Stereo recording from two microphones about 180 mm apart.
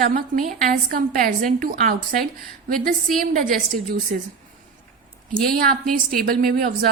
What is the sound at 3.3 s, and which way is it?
Speech, 50° right (ahead or behind).